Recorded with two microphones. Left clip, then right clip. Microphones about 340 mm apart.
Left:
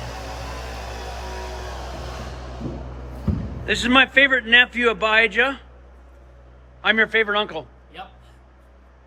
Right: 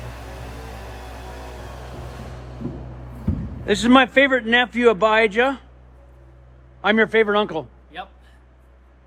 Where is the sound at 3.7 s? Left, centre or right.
Centre.